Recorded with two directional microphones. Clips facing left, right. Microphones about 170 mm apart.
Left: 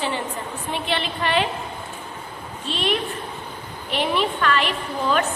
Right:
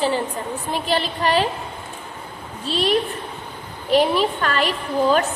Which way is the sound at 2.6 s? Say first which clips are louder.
Right 4 dB; 35° right (ahead or behind).